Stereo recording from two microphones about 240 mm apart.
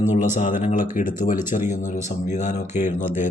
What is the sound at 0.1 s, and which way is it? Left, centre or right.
A man's voice, left.